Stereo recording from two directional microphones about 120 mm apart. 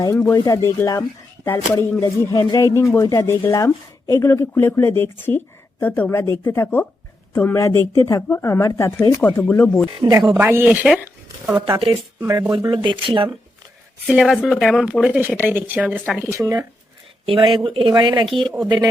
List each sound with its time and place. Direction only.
0.0 s a woman's voice: 25° left (ahead or behind)
10.3 s speech: 15° right (ahead or behind)
11.5 s speech: 50° right (ahead or behind)
12.2 s speech: 30° right (ahead or behind)
12.7 s speech: 45° right (ahead or behind)
14.1 s speech: 5° right (ahead or behind)
16.3 s speech: 25° right (ahead or behind)
17.2 s speech: 45° right (ahead or behind)